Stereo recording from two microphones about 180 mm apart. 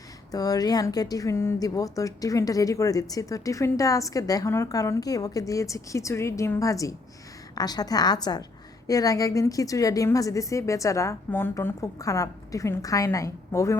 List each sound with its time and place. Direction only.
0.3 s a woman's voice: 20° left (ahead or behind)